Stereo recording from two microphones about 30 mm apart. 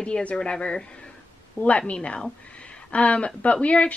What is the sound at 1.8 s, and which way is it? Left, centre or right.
Speech, left.